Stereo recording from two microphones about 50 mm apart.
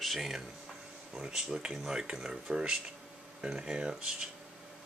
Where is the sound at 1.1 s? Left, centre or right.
Centre.